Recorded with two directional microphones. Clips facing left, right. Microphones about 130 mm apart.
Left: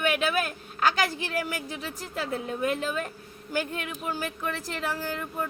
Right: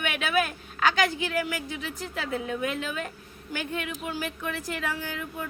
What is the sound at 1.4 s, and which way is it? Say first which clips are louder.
A woman's voice: right 1 dB; 35° left (ahead or behind).